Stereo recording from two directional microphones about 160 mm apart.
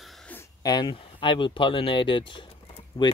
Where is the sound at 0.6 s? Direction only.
30° left (ahead or behind).